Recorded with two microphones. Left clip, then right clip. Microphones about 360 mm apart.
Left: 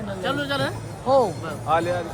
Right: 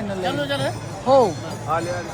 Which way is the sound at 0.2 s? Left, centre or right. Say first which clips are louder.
Right 1 dB; centre.